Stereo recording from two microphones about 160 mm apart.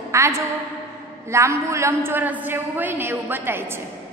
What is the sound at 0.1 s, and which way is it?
A woman's voice, 15° right (ahead or behind).